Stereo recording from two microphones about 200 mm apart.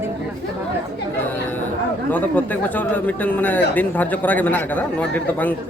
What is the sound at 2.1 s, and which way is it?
Speech, 10° left (ahead or behind).